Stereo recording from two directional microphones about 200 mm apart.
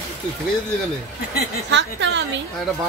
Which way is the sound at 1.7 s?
65° right (ahead or behind).